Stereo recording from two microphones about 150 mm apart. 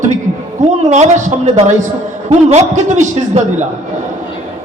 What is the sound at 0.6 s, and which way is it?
A man's voice, 50° right (ahead or behind).